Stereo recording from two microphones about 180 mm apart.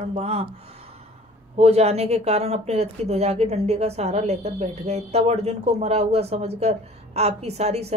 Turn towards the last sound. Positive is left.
turn(degrees=-35)  # may be behind; listen again after turning